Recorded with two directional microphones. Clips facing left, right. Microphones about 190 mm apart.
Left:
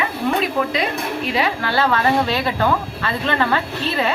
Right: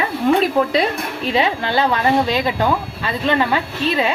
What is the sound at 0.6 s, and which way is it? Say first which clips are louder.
Speech: right 4 dB; 35° right (ahead or behind).